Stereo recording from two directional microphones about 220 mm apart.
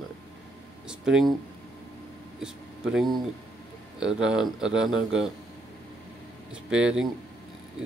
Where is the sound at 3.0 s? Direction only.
Centre (ahead or behind).